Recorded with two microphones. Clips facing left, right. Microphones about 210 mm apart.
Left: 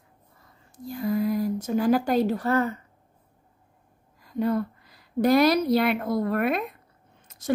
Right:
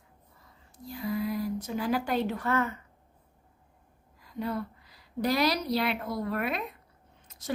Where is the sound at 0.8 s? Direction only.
45° left (ahead or behind).